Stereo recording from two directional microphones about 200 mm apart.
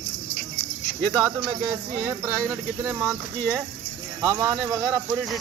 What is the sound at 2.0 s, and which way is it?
Speech, 10° right (ahead or behind).